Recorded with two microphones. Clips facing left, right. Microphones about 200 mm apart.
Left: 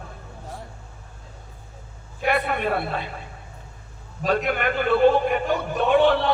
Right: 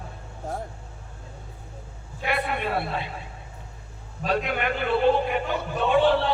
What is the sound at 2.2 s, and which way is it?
Speech, 50° left (ahead or behind).